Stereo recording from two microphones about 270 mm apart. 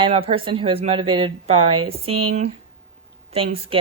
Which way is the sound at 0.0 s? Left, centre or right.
Right.